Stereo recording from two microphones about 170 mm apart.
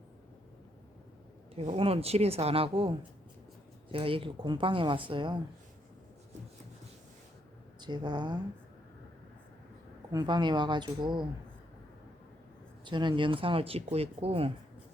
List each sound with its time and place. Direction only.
1.5 s speech: 35° right (ahead or behind)
7.8 s speech: 25° right (ahead or behind)
10.1 s speech: 25° right (ahead or behind)
12.8 s speech: 25° right (ahead or behind)